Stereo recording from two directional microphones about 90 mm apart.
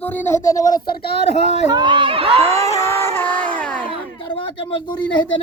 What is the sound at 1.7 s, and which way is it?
Speech, 60° right (ahead or behind).